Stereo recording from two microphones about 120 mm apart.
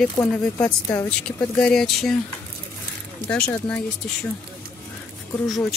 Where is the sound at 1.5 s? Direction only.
5° left (ahead or behind).